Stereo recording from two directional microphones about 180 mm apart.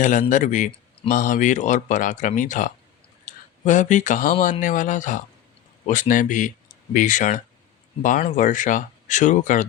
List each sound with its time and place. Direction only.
0.0 s speech: 45° left (ahead or behind)